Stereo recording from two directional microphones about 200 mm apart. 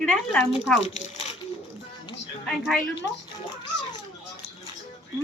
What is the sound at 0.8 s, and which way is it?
Speech, 35° left (ahead or behind).